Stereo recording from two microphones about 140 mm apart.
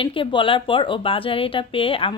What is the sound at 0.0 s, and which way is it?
Speech, 40° left (ahead or behind).